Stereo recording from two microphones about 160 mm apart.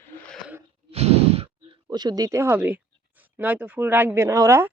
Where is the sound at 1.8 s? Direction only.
25° right (ahead or behind).